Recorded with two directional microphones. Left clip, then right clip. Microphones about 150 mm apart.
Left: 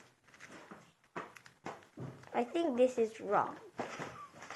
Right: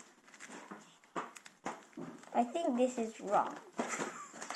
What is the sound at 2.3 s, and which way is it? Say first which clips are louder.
A woman's voice: right 1 dB; 45° left (ahead or behind).